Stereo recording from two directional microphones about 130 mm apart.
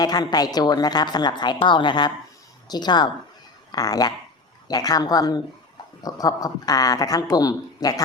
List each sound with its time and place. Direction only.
0.0 s a woman's voice: 30° left (ahead or behind)